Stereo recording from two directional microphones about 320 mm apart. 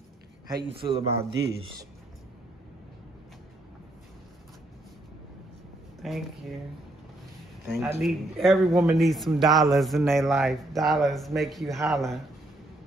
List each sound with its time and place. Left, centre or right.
0.5 s speech: centre
5.9 s speech: centre
7.6 s a man's voice: centre